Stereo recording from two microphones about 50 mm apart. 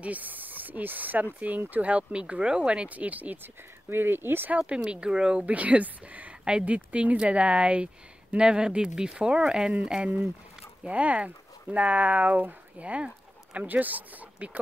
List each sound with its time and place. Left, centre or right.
0.0 s speech: right
2.9 s speech: right
3.9 s speech: right
4.5 s speech: right
10.8 s speech: right
13.7 s speech: right